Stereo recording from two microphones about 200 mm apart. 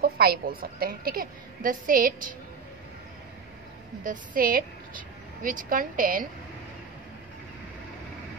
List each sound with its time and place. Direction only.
0.0 s a woman's voice: 50° right (ahead or behind)
4.0 s a woman's voice: 45° right (ahead or behind)